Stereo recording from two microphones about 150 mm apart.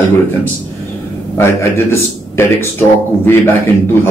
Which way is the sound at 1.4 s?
15° left (ahead or behind).